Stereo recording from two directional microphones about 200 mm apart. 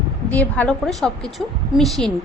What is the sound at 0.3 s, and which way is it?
A woman's voice, 5° left (ahead or behind).